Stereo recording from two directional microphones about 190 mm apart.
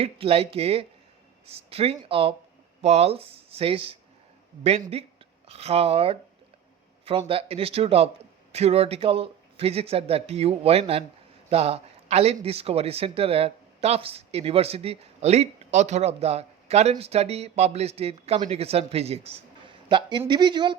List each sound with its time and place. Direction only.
0.0 s speech: 30° right (ahead or behind)
4.9 s speech: 30° right (ahead or behind)